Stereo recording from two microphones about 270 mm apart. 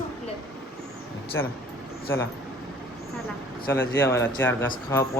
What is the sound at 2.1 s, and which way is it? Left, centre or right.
Speech, centre.